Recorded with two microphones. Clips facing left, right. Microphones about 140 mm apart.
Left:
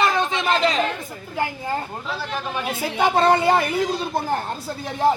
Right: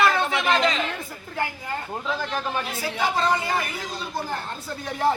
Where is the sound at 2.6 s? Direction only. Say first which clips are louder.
Left 5 dB; 55° left (ahead or behind).